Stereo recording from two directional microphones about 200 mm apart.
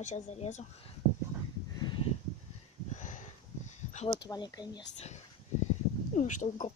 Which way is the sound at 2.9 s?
40° left (ahead or behind).